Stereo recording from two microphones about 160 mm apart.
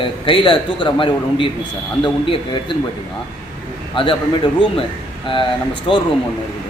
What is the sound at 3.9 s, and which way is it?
Speech, 35° left (ahead or behind).